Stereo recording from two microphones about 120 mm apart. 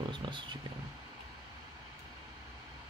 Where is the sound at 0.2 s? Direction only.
40° right (ahead or behind).